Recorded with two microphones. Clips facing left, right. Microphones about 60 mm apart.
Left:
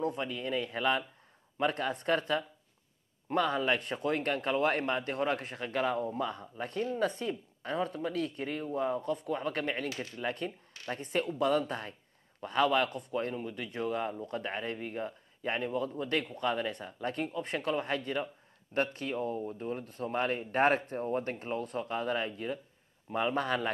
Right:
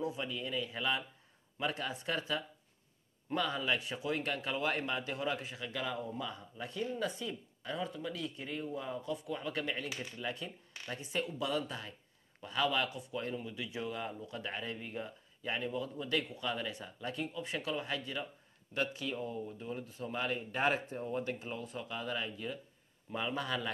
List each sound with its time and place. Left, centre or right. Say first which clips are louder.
0.0 s speech: left 4 dB; left